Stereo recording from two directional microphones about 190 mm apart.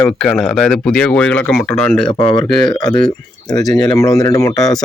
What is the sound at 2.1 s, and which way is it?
Speech, 25° left (ahead or behind).